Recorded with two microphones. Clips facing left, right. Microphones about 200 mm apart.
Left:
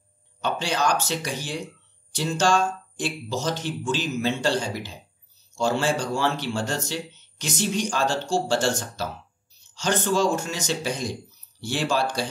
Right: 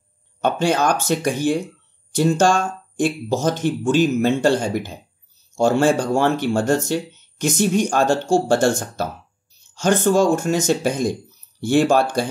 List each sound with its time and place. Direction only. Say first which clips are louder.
0.4 s speech: right 7 dB; 50° right (ahead or behind)